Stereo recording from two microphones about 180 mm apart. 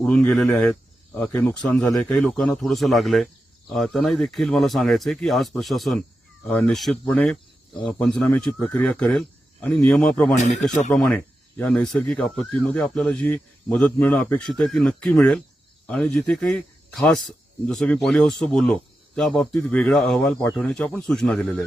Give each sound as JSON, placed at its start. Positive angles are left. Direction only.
{"t": 0.0, "sound": "speech", "side_deg": 5}
{"t": 10.3, "sound": "speech", "side_deg": 40}
{"t": 10.8, "sound": "speech", "side_deg": 5}